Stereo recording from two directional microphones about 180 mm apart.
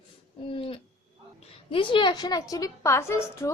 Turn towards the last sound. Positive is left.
turn(degrees=15)  # may be behind; listen again after turning